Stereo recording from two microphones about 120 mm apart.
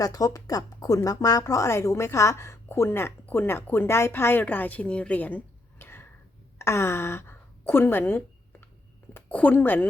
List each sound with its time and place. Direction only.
0.0 s speech: 30° left (ahead or behind); by 5.4 s 15° left (ahead or behind)
5.8 s a sound: 20° left (ahead or behind)
6.6 s a woman's voice: 25° left (ahead or behind)